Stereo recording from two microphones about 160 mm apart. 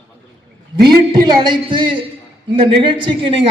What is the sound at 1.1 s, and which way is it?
Music, 30° right (ahead or behind).